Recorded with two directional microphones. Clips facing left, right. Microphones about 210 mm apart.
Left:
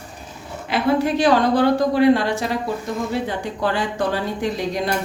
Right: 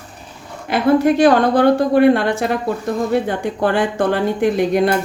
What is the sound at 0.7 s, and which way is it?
A woman's voice, 50° right (ahead or behind).